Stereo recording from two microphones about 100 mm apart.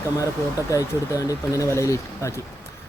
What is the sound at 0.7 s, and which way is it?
A man's voice, 35° left (ahead or behind).